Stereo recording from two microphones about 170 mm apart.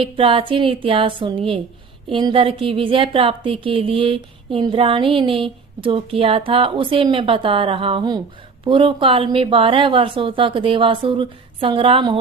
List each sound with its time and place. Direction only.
0.0 s a woman's voice: 30° right (ahead or behind)